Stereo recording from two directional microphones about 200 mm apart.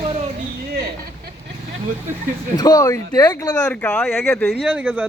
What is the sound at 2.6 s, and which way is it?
Speech, 20° left (ahead or behind).